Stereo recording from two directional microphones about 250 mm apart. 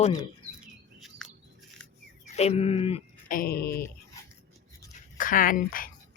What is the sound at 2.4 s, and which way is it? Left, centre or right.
Speech, left.